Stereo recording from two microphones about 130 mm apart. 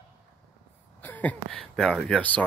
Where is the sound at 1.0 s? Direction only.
15° left (ahead or behind).